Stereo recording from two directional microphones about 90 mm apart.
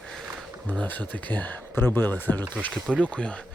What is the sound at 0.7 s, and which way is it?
Speech, 20° left (ahead or behind).